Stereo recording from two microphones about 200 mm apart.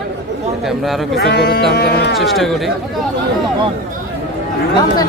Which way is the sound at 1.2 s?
50° left (ahead or behind).